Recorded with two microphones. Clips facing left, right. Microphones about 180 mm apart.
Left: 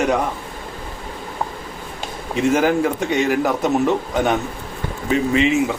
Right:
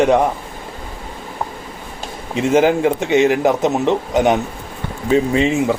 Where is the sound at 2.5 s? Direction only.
25° right (ahead or behind).